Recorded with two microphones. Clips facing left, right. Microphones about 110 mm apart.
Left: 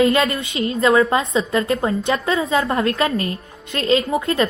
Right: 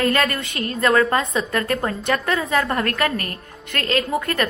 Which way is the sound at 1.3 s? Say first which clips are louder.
Left 3 dB; 20° left (ahead or behind).